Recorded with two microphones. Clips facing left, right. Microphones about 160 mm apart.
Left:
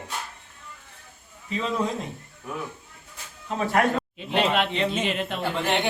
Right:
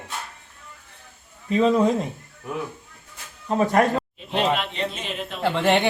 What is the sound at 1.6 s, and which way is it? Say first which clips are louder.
Speech: right 8 dB; centre (ahead or behind).